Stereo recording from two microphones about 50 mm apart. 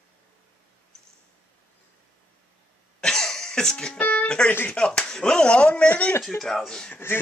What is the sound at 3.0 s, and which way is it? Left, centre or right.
Cough, centre.